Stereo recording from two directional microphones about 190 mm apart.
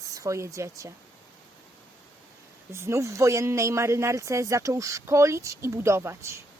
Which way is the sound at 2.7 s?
15° right (ahead or behind).